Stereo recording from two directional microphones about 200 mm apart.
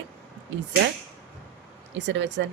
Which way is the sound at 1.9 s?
65° right (ahead or behind).